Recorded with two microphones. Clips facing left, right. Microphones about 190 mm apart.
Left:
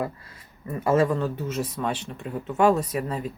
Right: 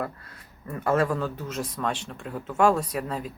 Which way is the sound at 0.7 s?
5° left (ahead or behind).